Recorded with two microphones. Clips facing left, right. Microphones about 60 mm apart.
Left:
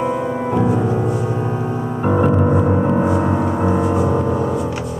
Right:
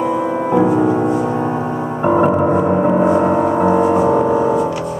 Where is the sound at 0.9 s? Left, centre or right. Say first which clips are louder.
Right 4 dB; right.